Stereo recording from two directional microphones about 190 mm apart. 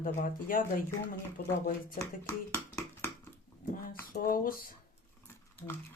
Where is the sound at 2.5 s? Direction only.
15° left (ahead or behind).